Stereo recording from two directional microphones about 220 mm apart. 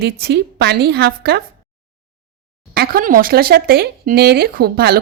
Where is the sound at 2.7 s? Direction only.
45° right (ahead or behind).